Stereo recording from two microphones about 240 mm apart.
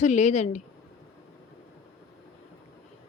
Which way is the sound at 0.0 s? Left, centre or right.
Left.